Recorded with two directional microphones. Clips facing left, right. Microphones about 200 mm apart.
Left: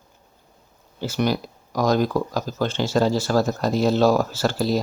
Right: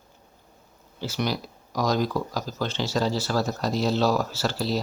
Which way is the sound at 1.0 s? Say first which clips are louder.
Left 5 dB; 50° left (ahead or behind).